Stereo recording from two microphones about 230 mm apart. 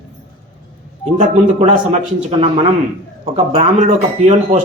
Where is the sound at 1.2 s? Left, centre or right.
Right.